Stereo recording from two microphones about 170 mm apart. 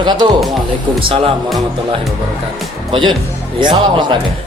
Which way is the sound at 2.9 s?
30° right (ahead or behind).